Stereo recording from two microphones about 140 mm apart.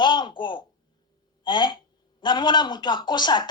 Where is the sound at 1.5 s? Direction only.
35° left (ahead or behind).